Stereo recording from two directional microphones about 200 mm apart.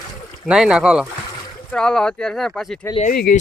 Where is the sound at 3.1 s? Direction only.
50° left (ahead or behind).